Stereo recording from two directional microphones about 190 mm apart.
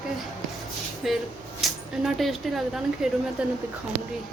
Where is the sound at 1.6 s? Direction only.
Centre (ahead or behind).